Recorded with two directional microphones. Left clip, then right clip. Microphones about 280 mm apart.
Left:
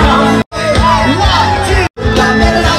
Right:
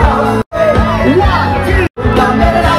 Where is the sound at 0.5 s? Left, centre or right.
Right.